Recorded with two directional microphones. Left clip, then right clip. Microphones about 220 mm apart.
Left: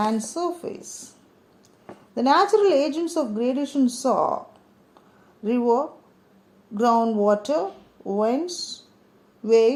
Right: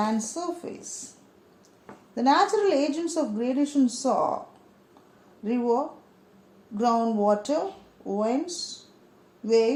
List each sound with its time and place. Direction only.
0.0 s speech: 30° left (ahead or behind)
2.1 s speech: 25° left (ahead or behind)
5.5 s speech: 30° left (ahead or behind)